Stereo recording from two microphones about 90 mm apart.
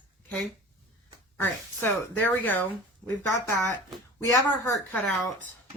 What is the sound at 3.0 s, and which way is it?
Speech, 30° left (ahead or behind).